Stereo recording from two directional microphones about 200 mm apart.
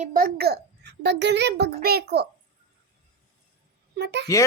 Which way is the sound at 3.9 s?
55° right (ahead or behind).